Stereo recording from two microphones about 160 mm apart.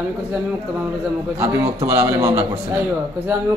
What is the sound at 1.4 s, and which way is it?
A man's voice, 20° right (ahead or behind).